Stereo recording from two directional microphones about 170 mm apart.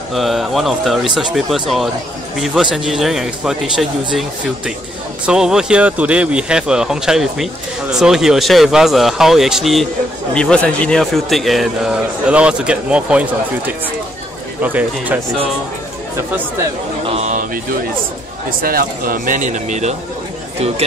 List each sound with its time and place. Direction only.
0.1 s a man's voice: centre (ahead or behind)
5.2 s a man's voice: 5° right (ahead or behind)
17.0 s a sound: 40° right (ahead or behind)
18.6 s speech: 55° right (ahead or behind)